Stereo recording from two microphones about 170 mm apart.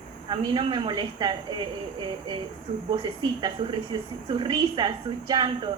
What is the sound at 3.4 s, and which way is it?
A woman's voice, 25° right (ahead or behind).